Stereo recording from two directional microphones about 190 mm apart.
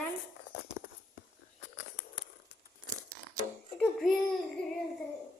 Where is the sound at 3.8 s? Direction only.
5° left (ahead or behind).